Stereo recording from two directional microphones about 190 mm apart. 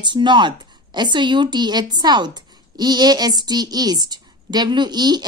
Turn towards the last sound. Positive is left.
turn(degrees=-20)  # may be behind; listen again after turning